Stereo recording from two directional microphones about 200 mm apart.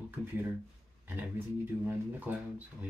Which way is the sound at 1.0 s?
10° right (ahead or behind).